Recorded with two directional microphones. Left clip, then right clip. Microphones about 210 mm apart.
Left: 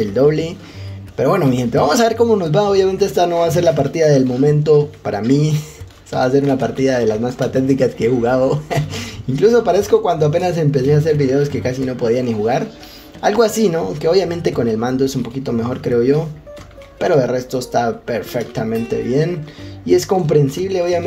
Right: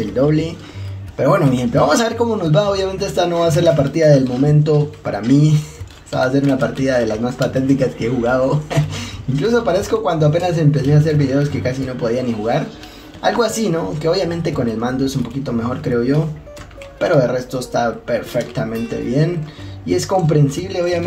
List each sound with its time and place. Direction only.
0.1 s speech: 45° left (ahead or behind)
19.9 s speech: 45° left (ahead or behind)